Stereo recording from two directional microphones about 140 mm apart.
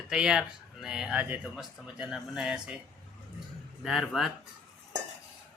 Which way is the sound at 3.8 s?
Centre (ahead or behind).